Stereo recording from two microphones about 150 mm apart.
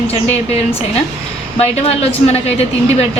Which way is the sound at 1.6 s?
45° left (ahead or behind).